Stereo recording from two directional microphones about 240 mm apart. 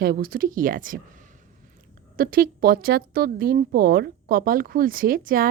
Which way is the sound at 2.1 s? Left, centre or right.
Right.